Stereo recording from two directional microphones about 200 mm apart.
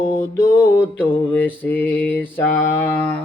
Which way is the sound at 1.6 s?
10° left (ahead or behind).